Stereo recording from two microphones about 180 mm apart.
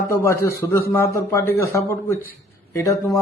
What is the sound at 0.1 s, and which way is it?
Speech, 15° left (ahead or behind).